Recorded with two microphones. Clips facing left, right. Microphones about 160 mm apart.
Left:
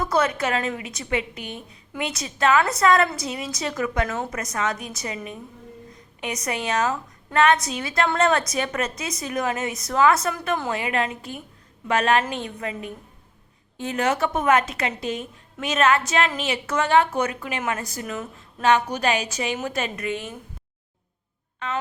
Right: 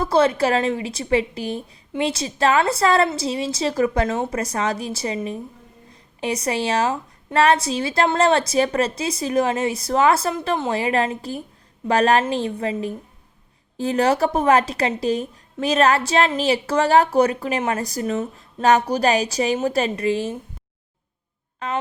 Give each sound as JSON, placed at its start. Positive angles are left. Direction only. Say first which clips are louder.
{"t": 0.0, "sound": "a woman's voice", "louder": "right 5 dB", "side_deg": -30}